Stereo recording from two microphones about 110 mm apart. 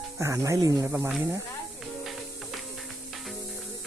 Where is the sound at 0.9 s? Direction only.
15° right (ahead or behind).